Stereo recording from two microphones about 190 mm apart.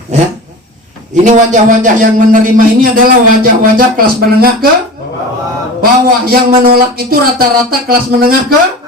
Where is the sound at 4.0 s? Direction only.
50° right (ahead or behind).